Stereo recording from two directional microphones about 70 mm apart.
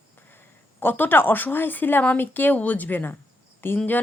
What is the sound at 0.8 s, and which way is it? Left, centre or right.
Speech, left.